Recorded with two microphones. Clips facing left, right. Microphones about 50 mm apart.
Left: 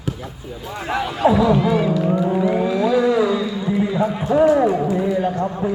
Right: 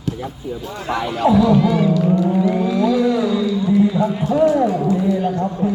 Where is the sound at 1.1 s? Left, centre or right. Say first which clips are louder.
Right 2 dB; left.